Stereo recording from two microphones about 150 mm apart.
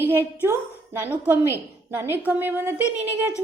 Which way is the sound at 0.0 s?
15° right (ahead or behind).